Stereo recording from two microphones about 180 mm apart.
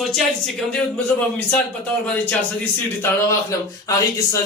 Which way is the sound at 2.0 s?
10° left (ahead or behind).